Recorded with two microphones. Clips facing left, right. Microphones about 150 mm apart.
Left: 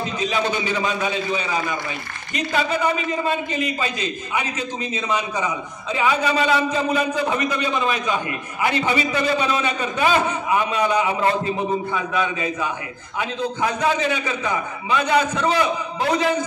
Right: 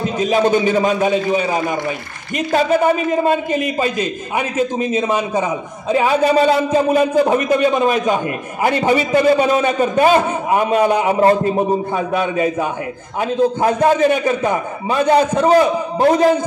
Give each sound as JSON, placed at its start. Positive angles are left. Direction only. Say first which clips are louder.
{"t": 0.2, "sound": "a man's voice", "louder": "right 10 dB", "side_deg": -45}